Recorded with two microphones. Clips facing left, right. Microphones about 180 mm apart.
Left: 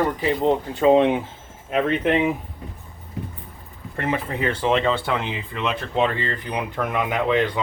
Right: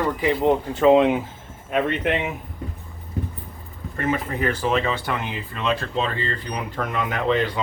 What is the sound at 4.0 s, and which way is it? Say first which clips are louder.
Speech: right 1 dB; 25° left (ahead or behind).